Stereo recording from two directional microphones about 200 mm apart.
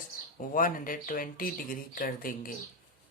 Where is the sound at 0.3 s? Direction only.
45° left (ahead or behind).